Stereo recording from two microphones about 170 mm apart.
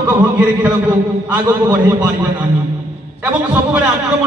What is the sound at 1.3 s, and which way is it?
Speech, 10° right (ahead or behind).